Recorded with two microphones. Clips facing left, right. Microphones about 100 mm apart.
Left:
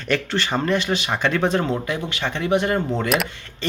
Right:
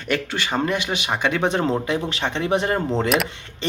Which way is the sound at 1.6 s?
30° right (ahead or behind).